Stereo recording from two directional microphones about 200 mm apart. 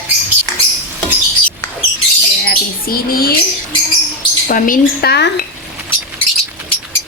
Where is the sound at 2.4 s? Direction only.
50° left (ahead or behind).